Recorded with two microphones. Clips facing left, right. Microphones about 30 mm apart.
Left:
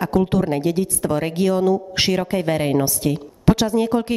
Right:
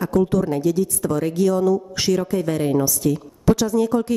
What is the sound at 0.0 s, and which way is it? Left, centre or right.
Speech, left.